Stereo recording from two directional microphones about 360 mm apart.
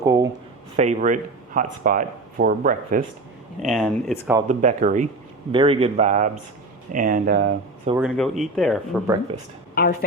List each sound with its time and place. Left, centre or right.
0.0 s a sound: centre
0.8 s speech: centre
3.6 s speech: centre
4.4 s speech: centre
7.9 s speech: centre